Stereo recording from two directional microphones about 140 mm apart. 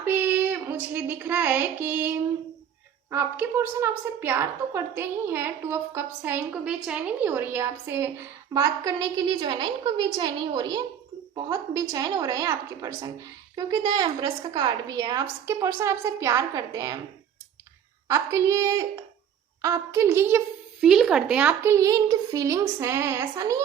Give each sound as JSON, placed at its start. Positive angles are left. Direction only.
{"t": 0.0, "sound": "a woman's voice", "side_deg": -15}
{"t": 18.1, "sound": "a woman's voice", "side_deg": -20}
{"t": 20.8, "sound": "a woman's voice", "side_deg": -5}